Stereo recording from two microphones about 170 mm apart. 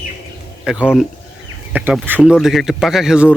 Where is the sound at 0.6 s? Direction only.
5° right (ahead or behind).